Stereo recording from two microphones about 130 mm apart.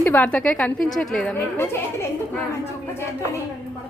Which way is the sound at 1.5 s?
15° left (ahead or behind).